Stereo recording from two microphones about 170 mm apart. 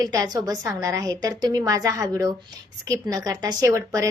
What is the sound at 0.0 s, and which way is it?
A woman's voice, 20° right (ahead or behind).